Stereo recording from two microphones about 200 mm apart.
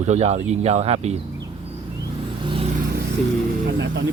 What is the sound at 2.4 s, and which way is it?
Vehicle, 25° right (ahead or behind).